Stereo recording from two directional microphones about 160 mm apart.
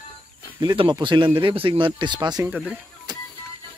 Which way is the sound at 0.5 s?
30° right (ahead or behind).